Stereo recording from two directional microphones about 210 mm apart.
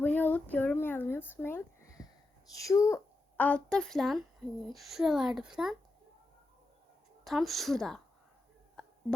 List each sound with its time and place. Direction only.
0.0 s a sound: 10° left (ahead or behind)
2.5 s a woman's voice: 15° left (ahead or behind); by 5.7 s centre (ahead or behind)
7.3 s speech: centre (ahead or behind)